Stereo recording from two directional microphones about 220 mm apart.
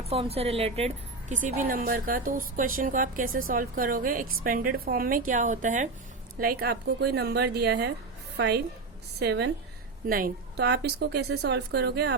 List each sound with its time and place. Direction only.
0.0 s a woman's voice: 25° right (ahead or behind); by 12.1 s 45° right (ahead or behind)